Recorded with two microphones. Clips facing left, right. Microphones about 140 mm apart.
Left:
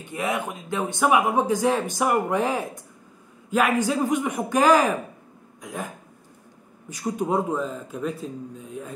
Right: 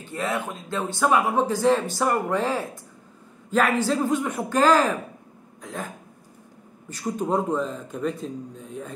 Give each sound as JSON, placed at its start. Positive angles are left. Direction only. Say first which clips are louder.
{"t": 0.0, "sound": "speech", "louder": "left 1 dB", "side_deg": 15}
{"t": 5.6, "sound": "a sound", "louder": "left 1 dB", "side_deg": 10}
{"t": 7.1, "sound": "a man's voice", "louder": "even", "side_deg": 5}